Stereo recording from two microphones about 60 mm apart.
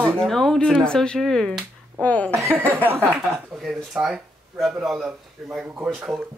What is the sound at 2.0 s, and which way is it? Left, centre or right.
Speech, left.